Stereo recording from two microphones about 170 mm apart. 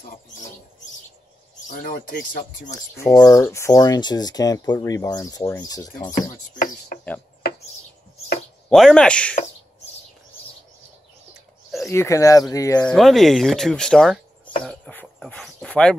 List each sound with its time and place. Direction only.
0.1 s speech: 50° left (ahead or behind)
1.7 s speech: 55° left (ahead or behind)
2.7 s speech: 15° left (ahead or behind)
8.6 s speech: 5° left (ahead or behind)
11.9 s speech: 15° left (ahead or behind)
12.8 s speech: centre (ahead or behind)
14.6 s a sound: 10° left (ahead or behind)